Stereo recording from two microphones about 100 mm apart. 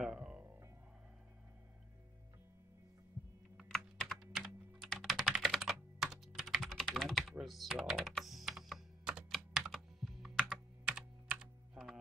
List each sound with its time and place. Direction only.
0.0 s music: 5° right (ahead or behind)
3.7 s computer keyboard: centre (ahead or behind)